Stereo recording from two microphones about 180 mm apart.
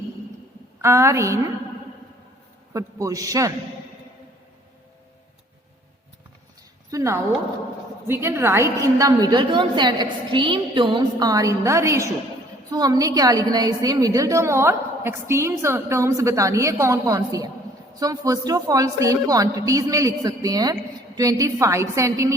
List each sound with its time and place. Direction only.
0.8 s a woman's voice: 15° right (ahead or behind)
2.7 s a woman's voice: 20° right (ahead or behind)
6.9 s a woman's voice: 15° right (ahead or behind)